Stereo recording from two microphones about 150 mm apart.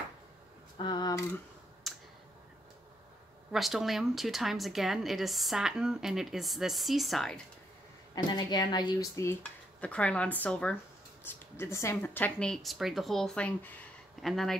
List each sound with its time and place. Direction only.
0.7 s a sound: 30° left (ahead or behind)
1.8 s tick: centre (ahead or behind)
3.5 s a woman's voice: centre (ahead or behind)
8.1 s speech: 30° left (ahead or behind)
9.4 s a woman's voice: 10° left (ahead or behind)